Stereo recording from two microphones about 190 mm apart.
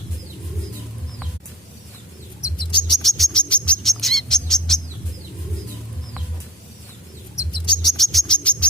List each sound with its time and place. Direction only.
2.4 s bird: 25° left (ahead or behind)
2.9 s bird: centre (ahead or behind)
7.3 s bird: 25° left (ahead or behind)
7.9 s bird: centre (ahead or behind)